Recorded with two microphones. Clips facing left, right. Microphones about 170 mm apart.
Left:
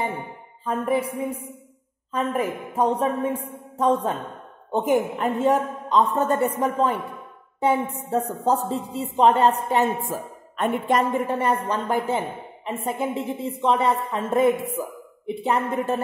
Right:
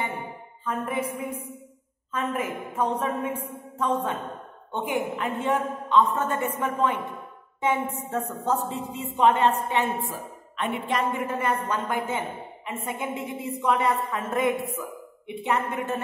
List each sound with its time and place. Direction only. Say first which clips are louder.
0.7 s a woman's voice: left 5 dB; 30° left (ahead or behind)